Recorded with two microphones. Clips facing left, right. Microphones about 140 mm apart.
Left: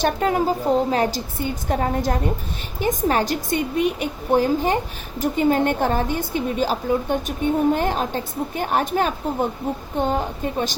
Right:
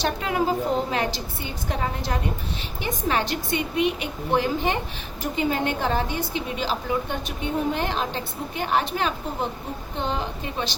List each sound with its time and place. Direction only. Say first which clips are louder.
0.0 s a woman's voice: left 4 dB; 45° left (ahead or behind)